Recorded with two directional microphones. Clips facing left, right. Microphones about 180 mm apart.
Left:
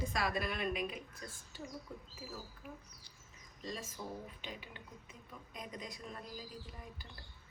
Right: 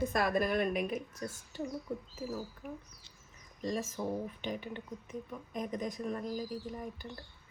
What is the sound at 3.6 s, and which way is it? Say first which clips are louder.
Speech: right 9 dB; 50° right (ahead or behind).